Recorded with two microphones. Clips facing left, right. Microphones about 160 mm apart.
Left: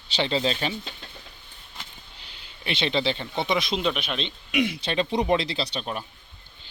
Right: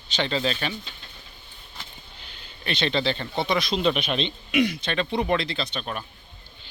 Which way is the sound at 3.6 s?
25° left (ahead or behind).